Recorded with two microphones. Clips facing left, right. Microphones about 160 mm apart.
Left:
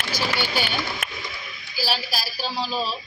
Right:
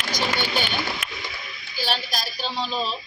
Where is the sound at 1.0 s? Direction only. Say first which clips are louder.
Left 2 dB; 50° left (ahead or behind).